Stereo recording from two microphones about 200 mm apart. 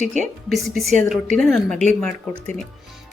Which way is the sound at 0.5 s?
Centre (ahead or behind).